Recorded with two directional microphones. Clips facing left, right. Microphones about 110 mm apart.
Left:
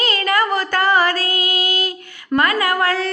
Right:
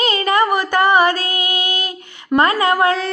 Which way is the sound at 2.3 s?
25° right (ahead or behind).